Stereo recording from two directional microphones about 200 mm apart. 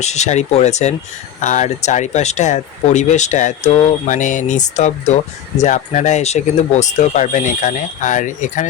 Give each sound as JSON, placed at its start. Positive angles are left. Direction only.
{"t": 0.0, "sound": "speech", "side_deg": 35}